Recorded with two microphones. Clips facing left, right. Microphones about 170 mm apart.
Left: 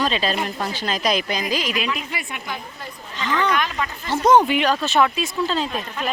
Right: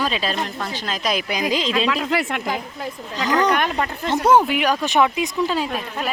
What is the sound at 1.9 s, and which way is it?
Speech, 85° right.